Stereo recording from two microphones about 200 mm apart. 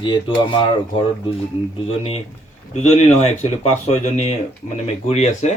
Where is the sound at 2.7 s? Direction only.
35° left (ahead or behind).